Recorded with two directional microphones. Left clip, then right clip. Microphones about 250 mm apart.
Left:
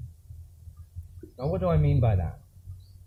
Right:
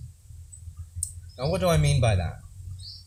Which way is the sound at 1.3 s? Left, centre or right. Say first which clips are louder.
Right 3 dB; right.